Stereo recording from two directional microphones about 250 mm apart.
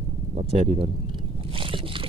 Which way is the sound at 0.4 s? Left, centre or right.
Right.